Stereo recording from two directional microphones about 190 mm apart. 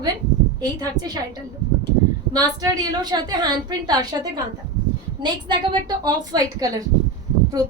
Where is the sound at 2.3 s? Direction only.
20° right (ahead or behind).